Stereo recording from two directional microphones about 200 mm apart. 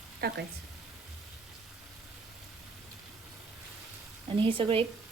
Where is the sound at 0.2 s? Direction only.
50° right (ahead or behind).